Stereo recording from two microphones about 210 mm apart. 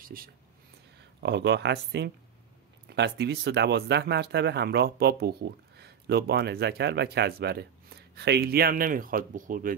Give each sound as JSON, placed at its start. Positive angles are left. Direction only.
{"t": 0.0, "sound": "speech", "side_deg": -45}
{"t": 1.2, "sound": "speech", "side_deg": -55}